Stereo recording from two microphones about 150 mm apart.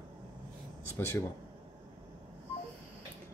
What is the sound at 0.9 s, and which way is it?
Speech, 15° left (ahead or behind).